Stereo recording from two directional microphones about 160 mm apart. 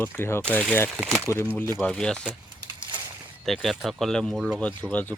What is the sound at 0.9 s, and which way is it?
Speech, 10° right (ahead or behind).